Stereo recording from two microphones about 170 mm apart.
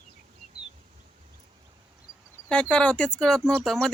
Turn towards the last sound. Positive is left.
turn(degrees=5)  # may be behind; listen again after turning